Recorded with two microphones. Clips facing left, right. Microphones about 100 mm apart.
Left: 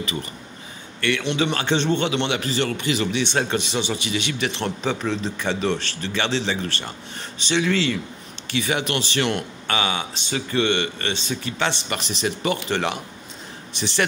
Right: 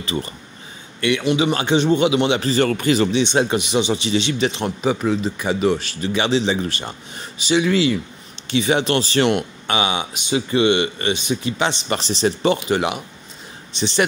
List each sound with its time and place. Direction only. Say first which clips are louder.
0.0 s speech: right 4 dB; 30° right (ahead or behind)
1.2 s speech: right 4 dB; 5° right (ahead or behind)
2.3 s speech: right 6 dB; 35° right (ahead or behind)
3.1 s speech: right 5 dB; 20° right (ahead or behind)
8.5 s speech: right 6 dB; 25° right (ahead or behind)
9.3 s speech: right 4 dB; 15° right (ahead or behind)
11.9 s speech: right 6 dB; 30° right (ahead or behind)
12.5 s speech: right 4 dB; 15° right (ahead or behind)